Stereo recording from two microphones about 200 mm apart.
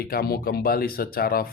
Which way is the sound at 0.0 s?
50° left (ahead or behind).